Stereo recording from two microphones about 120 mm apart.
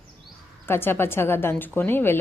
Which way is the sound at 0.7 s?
20° left (ahead or behind).